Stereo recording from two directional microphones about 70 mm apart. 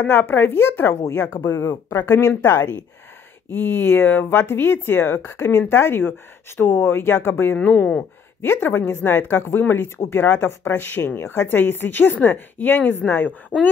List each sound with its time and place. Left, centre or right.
0.0 s speech: left
1.6 s speech: left
3.4 s speech: left
8.6 s speech: left
13.5 s speech: left